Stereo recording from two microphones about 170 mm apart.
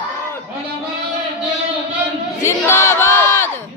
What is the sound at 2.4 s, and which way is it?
Crowd, 15° left (ahead or behind).